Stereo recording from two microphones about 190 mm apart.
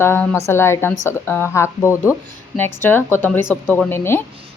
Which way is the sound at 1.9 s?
10° right (ahead or behind).